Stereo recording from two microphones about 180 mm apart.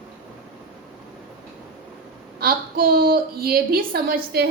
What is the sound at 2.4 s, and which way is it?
A woman's voice, 55° right (ahead or behind).